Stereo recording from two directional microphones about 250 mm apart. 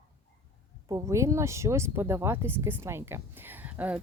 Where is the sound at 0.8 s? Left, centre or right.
Centre.